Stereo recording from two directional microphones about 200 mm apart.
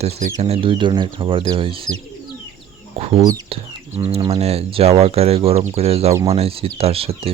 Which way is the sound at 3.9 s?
30° right (ahead or behind).